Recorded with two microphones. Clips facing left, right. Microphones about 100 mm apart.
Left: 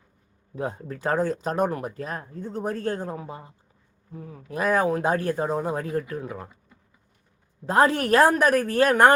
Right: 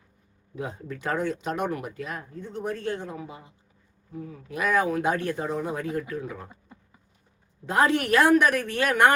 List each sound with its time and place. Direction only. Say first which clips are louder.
0.5 s speech: left 3 dB; 35° left (ahead or behind)
7.7 s speech: left 2 dB; 35° left (ahead or behind)